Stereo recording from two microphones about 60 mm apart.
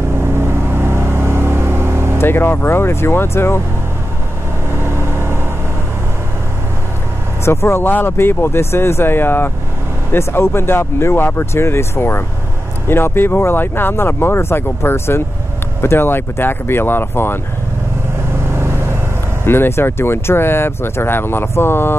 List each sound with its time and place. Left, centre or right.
0.2 s vehicle: right
2.1 s speech: left
4.8 s vehicle: right
7.4 s speech: left
19.4 s speech: left